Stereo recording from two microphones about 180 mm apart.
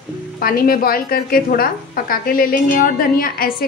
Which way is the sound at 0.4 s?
55° left (ahead or behind).